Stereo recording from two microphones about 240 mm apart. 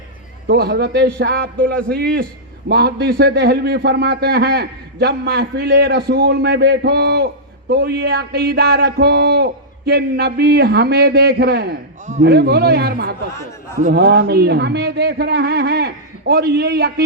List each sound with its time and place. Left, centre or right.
0.4 s a man's voice: right
2.6 s a man's voice: right